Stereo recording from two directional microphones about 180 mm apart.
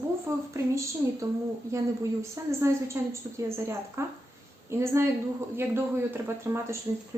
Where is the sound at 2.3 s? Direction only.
15° right (ahead or behind).